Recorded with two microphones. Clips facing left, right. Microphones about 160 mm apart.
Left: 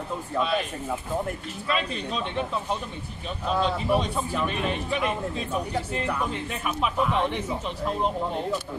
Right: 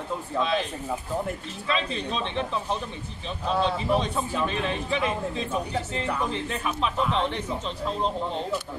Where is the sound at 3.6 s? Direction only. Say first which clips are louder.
Left 1 dB; 10° left (ahead or behind).